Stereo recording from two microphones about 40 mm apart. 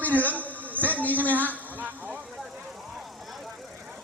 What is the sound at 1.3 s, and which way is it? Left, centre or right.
Speech, right.